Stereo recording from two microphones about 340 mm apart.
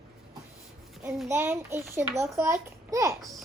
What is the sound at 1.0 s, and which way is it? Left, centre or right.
Child singing, centre.